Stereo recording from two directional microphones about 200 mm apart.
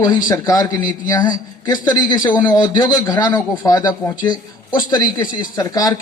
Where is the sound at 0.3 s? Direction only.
20° left (ahead or behind).